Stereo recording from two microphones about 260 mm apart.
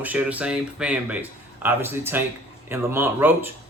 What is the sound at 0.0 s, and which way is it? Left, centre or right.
Speech, centre.